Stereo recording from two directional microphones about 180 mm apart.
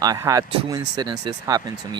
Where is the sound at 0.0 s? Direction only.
20° right (ahead or behind).